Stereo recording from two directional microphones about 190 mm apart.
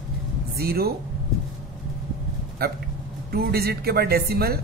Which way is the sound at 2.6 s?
55° right (ahead or behind).